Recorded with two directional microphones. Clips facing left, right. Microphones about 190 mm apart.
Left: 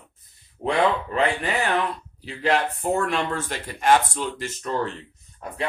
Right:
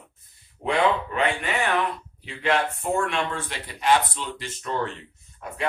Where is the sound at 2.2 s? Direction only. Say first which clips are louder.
Left 1 dB; 35° left (ahead or behind).